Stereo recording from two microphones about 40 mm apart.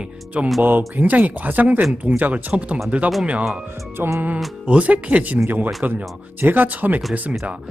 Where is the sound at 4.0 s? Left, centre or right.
Right.